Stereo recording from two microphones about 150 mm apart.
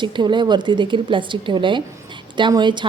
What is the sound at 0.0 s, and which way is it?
A woman's voice, 30° right (ahead or behind).